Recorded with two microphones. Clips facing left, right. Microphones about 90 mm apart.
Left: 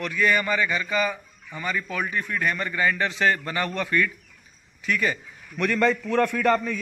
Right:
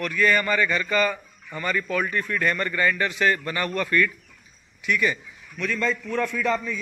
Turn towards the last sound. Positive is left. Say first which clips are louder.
# left 3 dB
turn(degrees=60)  # may be behind; listen again after turning